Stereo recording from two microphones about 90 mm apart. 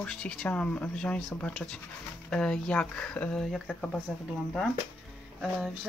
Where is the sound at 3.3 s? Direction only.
5° left (ahead or behind).